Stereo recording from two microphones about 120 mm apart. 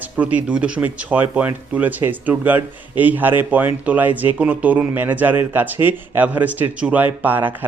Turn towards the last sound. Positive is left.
turn(degrees=-15)  # may be behind; listen again after turning